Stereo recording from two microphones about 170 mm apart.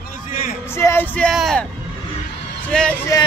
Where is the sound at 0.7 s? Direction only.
15° left (ahead or behind).